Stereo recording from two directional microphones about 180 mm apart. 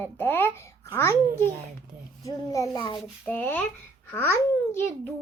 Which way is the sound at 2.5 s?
20° left (ahead or behind).